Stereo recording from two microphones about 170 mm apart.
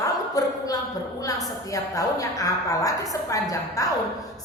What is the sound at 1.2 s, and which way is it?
A woman's voice, 20° left (ahead or behind).